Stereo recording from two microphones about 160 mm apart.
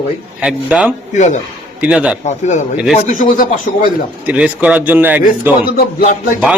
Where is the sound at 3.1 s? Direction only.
55° left (ahead or behind).